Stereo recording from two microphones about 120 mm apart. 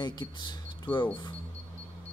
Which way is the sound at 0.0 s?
35° left (ahead or behind).